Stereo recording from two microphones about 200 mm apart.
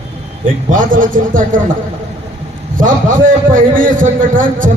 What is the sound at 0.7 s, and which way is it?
Speech, 40° right (ahead or behind).